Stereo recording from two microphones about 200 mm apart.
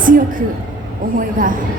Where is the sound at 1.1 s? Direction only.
40° right (ahead or behind).